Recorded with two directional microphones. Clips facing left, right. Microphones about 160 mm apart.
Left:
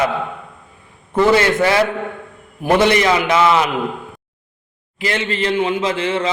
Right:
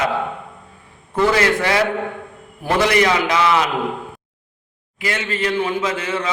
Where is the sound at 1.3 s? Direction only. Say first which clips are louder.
Left 3 dB; 25° left (ahead or behind).